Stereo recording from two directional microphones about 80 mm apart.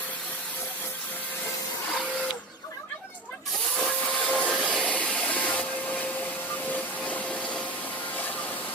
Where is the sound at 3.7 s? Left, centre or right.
Centre.